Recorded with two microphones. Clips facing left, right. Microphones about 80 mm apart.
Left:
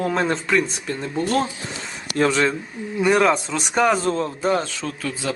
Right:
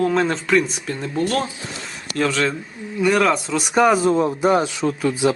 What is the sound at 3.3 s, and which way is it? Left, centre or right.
A man's voice, centre.